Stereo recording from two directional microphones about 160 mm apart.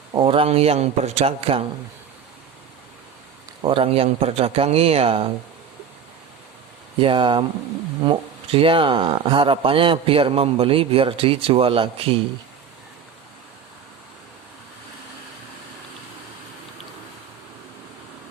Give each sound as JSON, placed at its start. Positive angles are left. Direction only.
{"t": 0.1, "sound": "speech", "side_deg": -30}
{"t": 3.6, "sound": "speech", "side_deg": -35}
{"t": 7.0, "sound": "speech", "side_deg": -30}